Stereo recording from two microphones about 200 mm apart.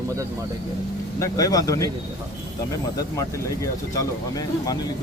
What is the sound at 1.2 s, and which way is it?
Speech, 15° left (ahead or behind).